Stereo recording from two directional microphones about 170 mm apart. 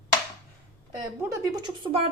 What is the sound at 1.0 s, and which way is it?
Speech, 20° right (ahead or behind).